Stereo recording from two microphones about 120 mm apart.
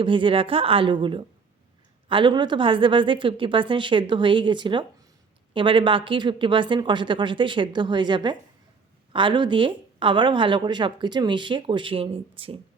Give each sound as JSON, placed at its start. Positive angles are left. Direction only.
{"t": 0.0, "sound": "a woman's voice", "side_deg": -45}